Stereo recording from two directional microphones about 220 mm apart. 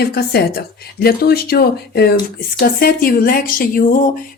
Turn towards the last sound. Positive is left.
turn(degrees=40)  # may be behind; listen again after turning